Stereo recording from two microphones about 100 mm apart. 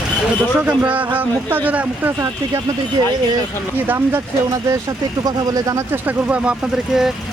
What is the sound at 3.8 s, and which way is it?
Speech, 25° right (ahead or behind).